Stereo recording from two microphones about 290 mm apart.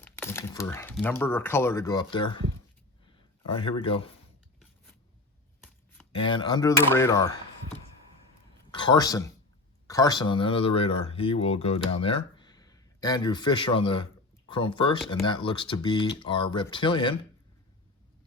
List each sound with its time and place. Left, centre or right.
0.0 s a sound: centre
1.2 s speech: centre
3.5 s speech: centre
6.1 s speech: centre
8.7 s a man's voice: centre